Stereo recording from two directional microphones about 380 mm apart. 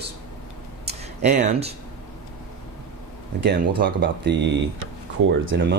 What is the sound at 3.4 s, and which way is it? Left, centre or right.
Speech, right.